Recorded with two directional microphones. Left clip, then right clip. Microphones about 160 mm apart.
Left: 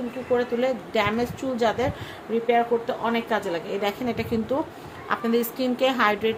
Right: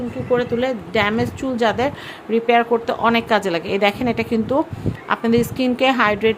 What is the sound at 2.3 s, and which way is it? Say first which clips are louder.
A woman's voice: right 6 dB; 70° right (ahead or behind).